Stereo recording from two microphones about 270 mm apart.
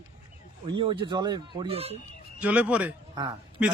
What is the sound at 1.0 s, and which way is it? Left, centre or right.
Speech, centre.